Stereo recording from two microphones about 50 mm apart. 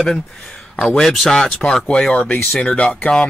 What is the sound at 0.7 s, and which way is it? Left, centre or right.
Speech, centre.